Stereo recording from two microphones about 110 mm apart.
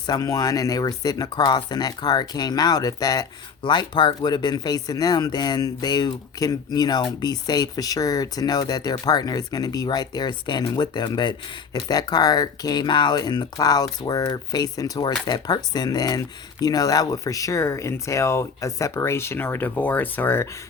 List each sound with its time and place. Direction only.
0.1 s speech: 35° left (ahead or behind); by 20.5 s 20° left (ahead or behind)